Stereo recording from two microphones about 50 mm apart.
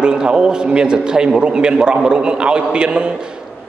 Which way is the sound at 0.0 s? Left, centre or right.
Centre.